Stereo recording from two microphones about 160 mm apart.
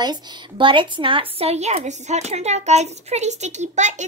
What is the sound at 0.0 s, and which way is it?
A woman's voice, 30° right (ahead or behind).